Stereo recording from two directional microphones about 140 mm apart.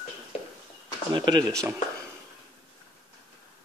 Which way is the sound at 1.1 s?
35° right (ahead or behind).